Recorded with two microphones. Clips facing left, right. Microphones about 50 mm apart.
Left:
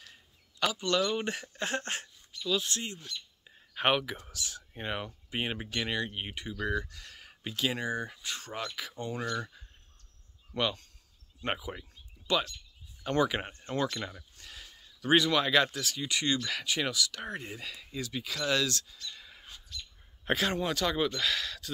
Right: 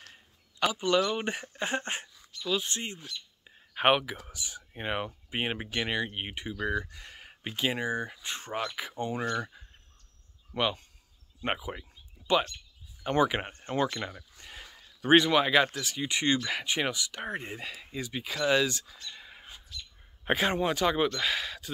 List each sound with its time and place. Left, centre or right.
0.7 s speech: centre
3.1 s a sound: centre
4.3 s speech: centre
9.4 s speech: centre
13.0 s speech: right
16.1 s speech: right
18.9 s a sound: right
20.2 s speech: centre